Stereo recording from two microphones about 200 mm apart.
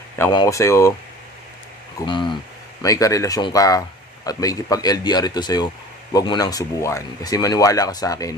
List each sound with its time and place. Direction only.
0.2 s speech: 15° left (ahead or behind)
2.0 s speech: 25° left (ahead or behind)